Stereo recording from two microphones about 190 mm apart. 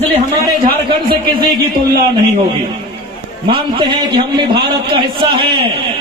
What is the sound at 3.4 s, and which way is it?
A man's voice, 25° right (ahead or behind).